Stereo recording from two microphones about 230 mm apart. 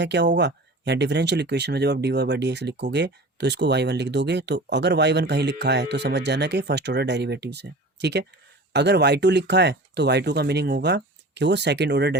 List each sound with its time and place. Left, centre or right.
0.0 s speech: right